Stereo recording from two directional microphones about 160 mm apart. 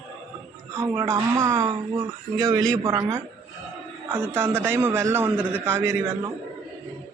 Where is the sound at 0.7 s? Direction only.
15° right (ahead or behind).